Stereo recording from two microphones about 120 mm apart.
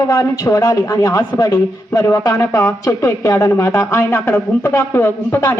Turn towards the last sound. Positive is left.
turn(degrees=15)  # may be behind; listen again after turning